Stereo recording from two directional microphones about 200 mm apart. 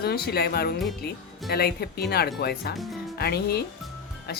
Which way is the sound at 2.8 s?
Centre (ahead or behind).